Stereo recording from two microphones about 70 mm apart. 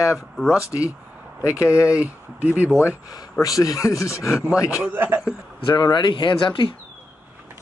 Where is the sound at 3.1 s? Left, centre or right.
Left.